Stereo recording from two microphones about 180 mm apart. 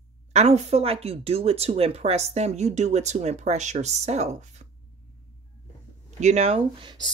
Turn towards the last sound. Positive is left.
turn(degrees=-25)  # may be behind; listen again after turning